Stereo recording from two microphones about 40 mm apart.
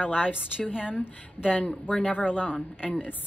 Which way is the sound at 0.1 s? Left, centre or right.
Right.